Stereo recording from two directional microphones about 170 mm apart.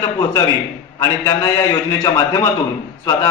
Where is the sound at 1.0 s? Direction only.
20° left (ahead or behind).